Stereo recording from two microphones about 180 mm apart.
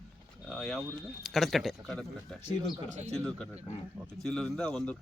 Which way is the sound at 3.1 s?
5° left (ahead or behind).